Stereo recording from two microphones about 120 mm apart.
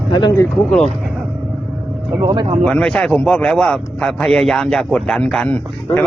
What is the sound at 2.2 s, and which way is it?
Speech, 35° right (ahead or behind).